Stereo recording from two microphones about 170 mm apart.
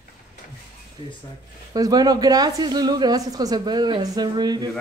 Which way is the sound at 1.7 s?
20° right (ahead or behind).